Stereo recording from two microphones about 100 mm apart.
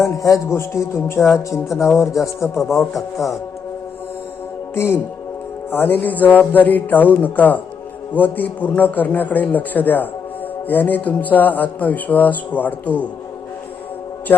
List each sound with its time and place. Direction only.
0.2 s a man's voice: 30° left (ahead or behind)
1.8 s speech: centre (ahead or behind)
4.7 s speech: 25° left (ahead or behind)
5.7 s music: 20° left (ahead or behind)
14.3 s music: 20° left (ahead or behind)